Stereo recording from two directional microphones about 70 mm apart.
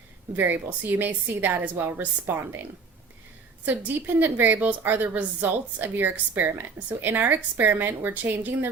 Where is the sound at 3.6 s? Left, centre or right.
Right.